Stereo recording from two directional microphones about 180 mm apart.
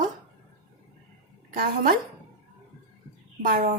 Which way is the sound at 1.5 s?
55° right (ahead or behind).